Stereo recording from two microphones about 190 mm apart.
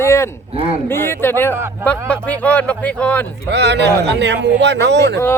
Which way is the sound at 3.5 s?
60° right (ahead or behind).